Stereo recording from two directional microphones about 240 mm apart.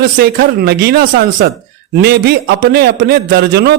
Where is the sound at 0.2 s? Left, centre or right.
Right.